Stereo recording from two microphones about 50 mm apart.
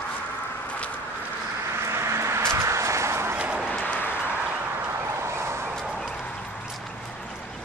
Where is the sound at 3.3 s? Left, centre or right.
Right.